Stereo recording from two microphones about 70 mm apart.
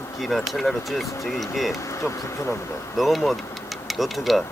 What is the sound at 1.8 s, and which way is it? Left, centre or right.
Speech, left.